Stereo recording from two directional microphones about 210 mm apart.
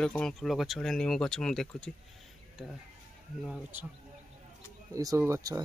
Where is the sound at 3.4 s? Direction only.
5° right (ahead or behind).